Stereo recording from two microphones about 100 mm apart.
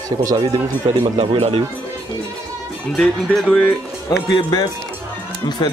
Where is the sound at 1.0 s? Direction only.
70° right (ahead or behind).